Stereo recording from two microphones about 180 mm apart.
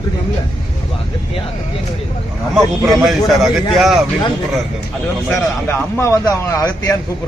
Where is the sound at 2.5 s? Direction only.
Centre (ahead or behind).